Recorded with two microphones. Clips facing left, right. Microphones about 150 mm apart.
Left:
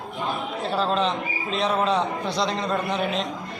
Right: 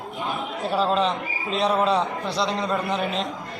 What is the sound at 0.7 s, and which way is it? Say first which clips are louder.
A man's voice: right 2 dB; 5° right (ahead or behind).